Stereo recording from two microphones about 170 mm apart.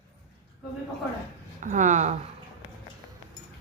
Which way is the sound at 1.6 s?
45° right (ahead or behind).